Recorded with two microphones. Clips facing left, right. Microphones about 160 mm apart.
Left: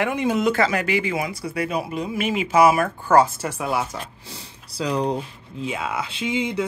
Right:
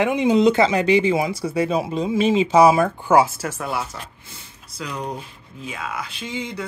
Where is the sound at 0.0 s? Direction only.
20° right (ahead or behind).